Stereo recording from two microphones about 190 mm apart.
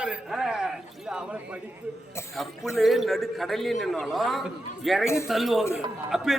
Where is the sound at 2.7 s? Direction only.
Centre (ahead or behind).